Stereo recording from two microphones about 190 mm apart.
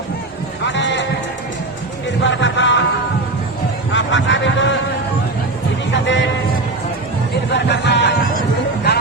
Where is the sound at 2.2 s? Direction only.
75° left (ahead or behind).